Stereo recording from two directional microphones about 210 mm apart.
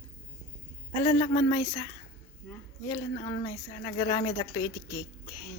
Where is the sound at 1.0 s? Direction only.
20° left (ahead or behind).